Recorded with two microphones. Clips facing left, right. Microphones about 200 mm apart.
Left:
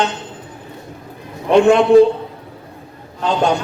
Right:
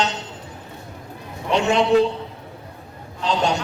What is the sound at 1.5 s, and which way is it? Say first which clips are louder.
Speech: left 8 dB; 55° left (ahead or behind).